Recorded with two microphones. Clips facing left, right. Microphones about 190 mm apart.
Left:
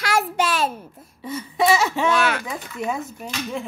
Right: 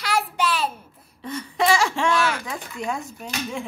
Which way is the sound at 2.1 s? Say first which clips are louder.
Left 2 dB; 60° left (ahead or behind).